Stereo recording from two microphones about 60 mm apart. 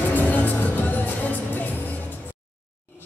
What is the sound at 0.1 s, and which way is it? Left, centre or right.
Music, left.